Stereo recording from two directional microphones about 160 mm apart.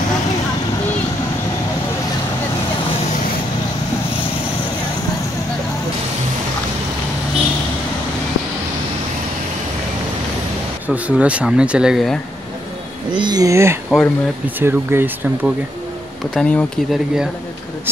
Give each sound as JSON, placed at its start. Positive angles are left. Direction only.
{"t": 10.9, "sound": "speech", "side_deg": -5}
{"t": 13.1, "sound": "speech", "side_deg": -25}
{"t": 13.8, "sound": "speech", "side_deg": 0}
{"t": 14.6, "sound": "speech", "side_deg": -15}
{"t": 16.3, "sound": "speech", "side_deg": 5}